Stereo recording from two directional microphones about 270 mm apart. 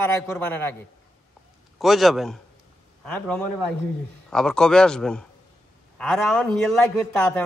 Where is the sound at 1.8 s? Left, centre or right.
Centre.